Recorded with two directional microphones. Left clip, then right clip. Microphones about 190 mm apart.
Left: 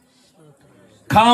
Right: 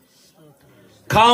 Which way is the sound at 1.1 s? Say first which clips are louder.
Left 1 dB; 30° right (ahead or behind).